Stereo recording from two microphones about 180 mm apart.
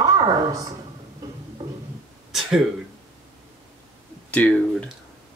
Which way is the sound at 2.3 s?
Centre (ahead or behind).